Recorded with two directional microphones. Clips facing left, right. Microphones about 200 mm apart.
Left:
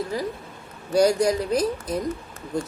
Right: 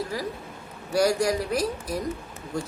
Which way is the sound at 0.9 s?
20° left (ahead or behind).